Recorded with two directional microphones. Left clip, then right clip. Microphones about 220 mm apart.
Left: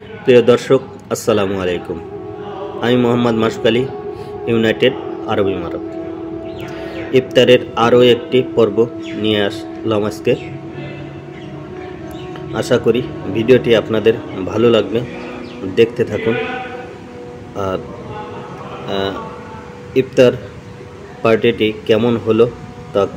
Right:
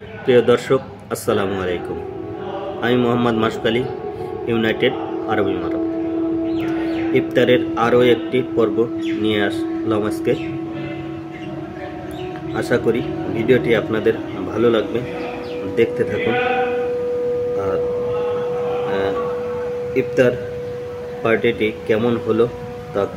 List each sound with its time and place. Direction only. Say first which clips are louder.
0.3 s a man's voice: left 4 dB; 20° left (ahead or behind)
2.8 s a man's voice: left 3 dB; 15° left (ahead or behind)
7.2 s a man's voice: left 6 dB; 20° left (ahead or behind)
12.5 s a man's voice: left 4 dB; 15° left (ahead or behind)
20.0 s a man's voice: left 5 dB; 20° left (ahead or behind)